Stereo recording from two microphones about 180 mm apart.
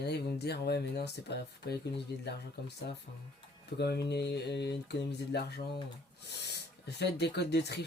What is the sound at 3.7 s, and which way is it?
Speech, 65° left (ahead or behind).